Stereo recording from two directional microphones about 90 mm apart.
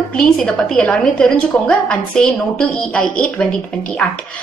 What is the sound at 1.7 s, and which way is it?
A woman's voice, 10° left (ahead or behind).